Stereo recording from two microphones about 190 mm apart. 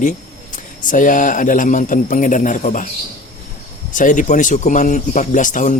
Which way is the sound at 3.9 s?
45° left (ahead or behind).